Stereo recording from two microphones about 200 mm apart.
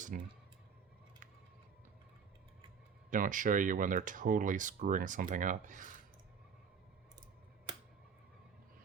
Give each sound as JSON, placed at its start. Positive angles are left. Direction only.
{"t": 0.1, "sound": "speech", "side_deg": -45}
{"t": 3.1, "sound": "speech", "side_deg": -40}